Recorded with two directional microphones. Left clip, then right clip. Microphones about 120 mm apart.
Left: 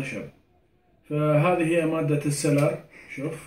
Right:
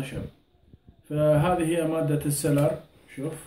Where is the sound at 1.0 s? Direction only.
20° right (ahead or behind).